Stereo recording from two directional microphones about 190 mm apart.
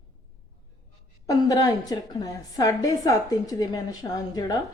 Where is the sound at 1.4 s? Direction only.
20° left (ahead or behind).